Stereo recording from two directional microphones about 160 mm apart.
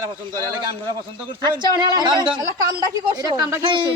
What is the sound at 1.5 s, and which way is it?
A woman's voice, 30° right (ahead or behind).